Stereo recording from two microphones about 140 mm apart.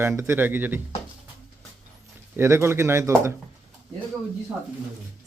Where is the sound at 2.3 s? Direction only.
20° right (ahead or behind).